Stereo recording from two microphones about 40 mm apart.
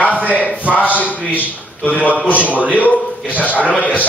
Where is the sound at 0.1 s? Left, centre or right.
Right.